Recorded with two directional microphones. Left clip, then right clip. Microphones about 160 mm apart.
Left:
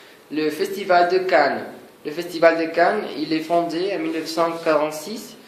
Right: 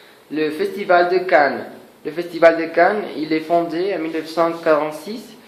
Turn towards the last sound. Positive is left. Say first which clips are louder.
# right 2 dB
turn(degrees=-40)  # may be behind; listen again after turning